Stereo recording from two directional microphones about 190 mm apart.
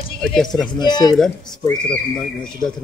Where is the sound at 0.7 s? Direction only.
20° left (ahead or behind).